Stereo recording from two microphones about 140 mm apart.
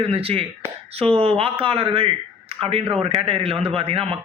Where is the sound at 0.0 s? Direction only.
45° right (ahead or behind).